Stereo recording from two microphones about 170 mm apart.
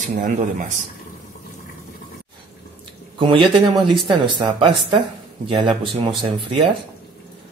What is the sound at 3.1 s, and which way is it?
Speech, 30° right (ahead or behind).